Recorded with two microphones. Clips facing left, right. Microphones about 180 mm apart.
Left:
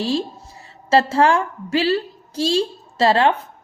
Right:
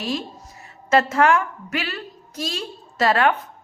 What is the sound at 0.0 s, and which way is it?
A woman's voice, 30° left (ahead or behind).